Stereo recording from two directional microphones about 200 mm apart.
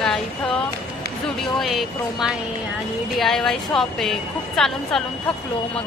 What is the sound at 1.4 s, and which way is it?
Speech, centre (ahead or behind).